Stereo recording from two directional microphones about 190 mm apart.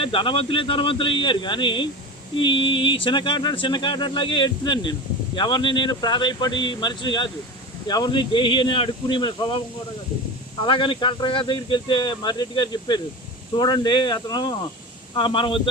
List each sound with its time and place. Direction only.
0.0 s speech: 25° left (ahead or behind)